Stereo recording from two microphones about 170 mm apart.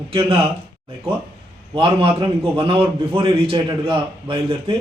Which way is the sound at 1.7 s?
30° right (ahead or behind).